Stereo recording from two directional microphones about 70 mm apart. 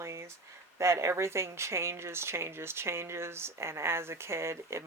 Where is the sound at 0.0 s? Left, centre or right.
Right.